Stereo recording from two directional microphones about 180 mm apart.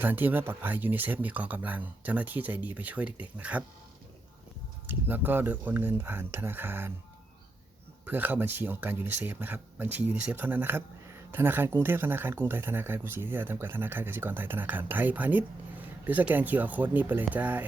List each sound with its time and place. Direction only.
0.0 s speech: 10° right (ahead or behind)
4.9 s speech: 10° right (ahead or behind)
8.0 s speech: 10° right (ahead or behind)